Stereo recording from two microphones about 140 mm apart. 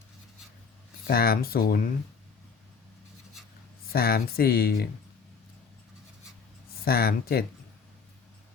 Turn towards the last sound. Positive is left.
turn(degrees=90)